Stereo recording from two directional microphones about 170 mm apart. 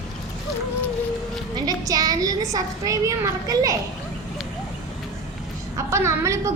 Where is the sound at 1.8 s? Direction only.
20° right (ahead or behind).